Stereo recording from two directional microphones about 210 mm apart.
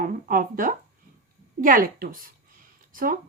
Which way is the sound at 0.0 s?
40° right (ahead or behind).